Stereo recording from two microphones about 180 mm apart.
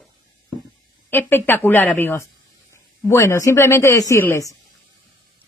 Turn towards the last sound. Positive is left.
turn(degrees=15)  # may be behind; listen again after turning